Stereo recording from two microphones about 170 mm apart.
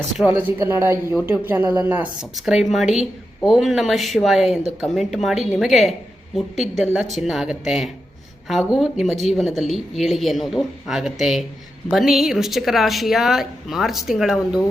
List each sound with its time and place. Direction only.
0.2 s a woman's voice: 10° right (ahead or behind)